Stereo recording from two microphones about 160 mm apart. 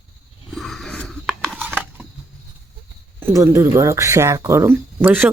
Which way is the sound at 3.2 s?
15° right (ahead or behind).